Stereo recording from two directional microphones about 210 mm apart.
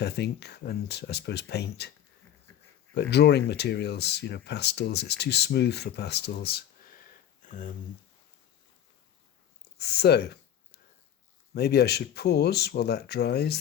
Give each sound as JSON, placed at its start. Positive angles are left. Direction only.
{"t": 0.0, "sound": "speech", "side_deg": 50}
{"t": 2.9, "sound": "speech", "side_deg": 50}
{"t": 7.4, "sound": "a sound", "side_deg": 35}
{"t": 9.7, "sound": "speech", "side_deg": 50}
{"t": 11.5, "sound": "speech", "side_deg": 50}